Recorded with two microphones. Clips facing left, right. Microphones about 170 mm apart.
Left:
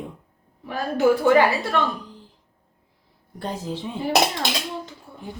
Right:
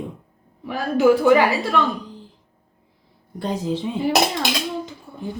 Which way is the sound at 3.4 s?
15° right (ahead or behind).